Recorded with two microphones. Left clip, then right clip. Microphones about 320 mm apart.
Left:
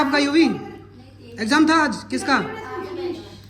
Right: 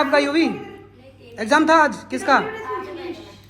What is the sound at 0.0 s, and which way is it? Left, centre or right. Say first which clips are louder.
Speech: right 2 dB; centre.